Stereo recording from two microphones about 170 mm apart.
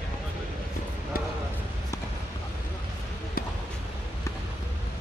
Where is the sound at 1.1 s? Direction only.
60° left (ahead or behind).